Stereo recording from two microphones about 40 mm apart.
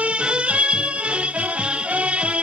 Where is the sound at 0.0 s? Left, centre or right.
Right.